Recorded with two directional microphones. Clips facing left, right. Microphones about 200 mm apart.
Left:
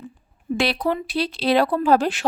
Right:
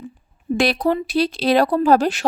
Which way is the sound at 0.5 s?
45° right (ahead or behind).